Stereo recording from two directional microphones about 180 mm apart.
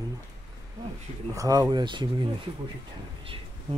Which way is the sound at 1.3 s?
20° right (ahead or behind).